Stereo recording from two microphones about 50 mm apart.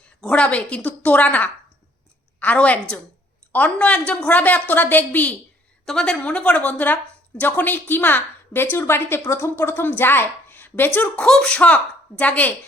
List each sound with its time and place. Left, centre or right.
0.3 s a woman's voice: left
5.8 s a woman's voice: centre
6.1 s a woman's voice: left
11.3 s speech: centre
11.5 s a woman's voice: left